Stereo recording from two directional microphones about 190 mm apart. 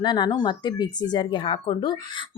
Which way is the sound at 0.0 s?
25° left (ahead or behind).